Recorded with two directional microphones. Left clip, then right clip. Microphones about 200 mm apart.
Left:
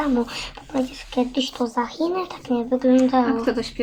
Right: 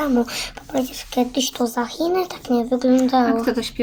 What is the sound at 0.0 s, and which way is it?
Speech, 45° right (ahead or behind).